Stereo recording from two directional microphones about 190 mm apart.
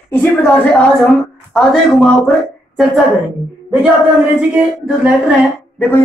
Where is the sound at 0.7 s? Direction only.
5° left (ahead or behind).